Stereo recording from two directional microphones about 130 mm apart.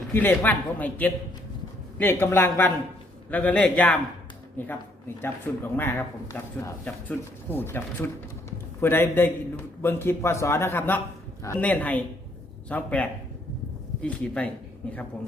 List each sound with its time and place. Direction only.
0.1 s a man's voice: 15° left (ahead or behind)